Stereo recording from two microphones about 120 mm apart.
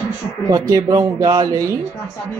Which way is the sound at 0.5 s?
30° right (ahead or behind).